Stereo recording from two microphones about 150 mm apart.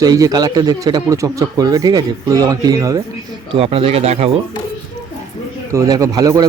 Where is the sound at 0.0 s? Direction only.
25° right (ahead or behind).